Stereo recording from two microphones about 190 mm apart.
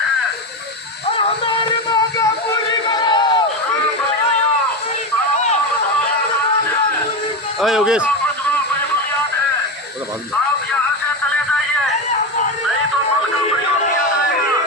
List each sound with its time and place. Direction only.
1.1 s music: 25° left (ahead or behind)
2.9 s a sound: 20° left (ahead or behind)
7.6 s speech: centre (ahead or behind)